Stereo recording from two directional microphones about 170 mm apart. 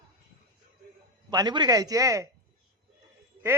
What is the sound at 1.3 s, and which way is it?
Speech, 25° right (ahead or behind).